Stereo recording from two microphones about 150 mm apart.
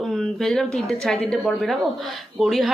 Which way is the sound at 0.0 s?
5° left (ahead or behind).